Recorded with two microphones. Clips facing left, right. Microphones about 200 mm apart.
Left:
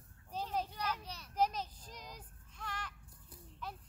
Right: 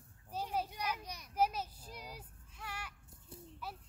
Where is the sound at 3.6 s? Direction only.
5° right (ahead or behind).